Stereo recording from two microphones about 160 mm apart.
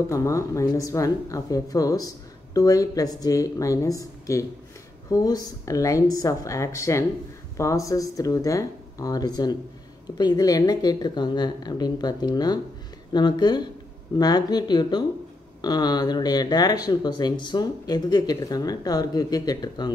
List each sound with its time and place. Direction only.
0.1 s speech: 20° left (ahead or behind)